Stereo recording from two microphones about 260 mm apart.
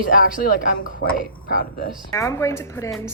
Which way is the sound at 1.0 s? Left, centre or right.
Left.